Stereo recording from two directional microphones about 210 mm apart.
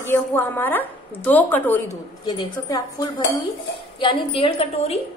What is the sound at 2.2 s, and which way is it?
A woman's voice, 20° left (ahead or behind).